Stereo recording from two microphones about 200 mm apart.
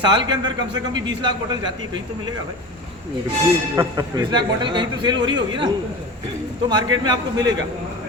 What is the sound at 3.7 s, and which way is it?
A man's voice, 15° right (ahead or behind).